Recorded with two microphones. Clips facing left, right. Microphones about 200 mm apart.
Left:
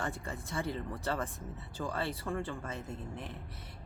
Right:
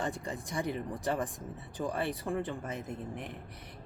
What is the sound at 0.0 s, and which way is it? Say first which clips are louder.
Speech: right 3 dB; 20° right (ahead or behind).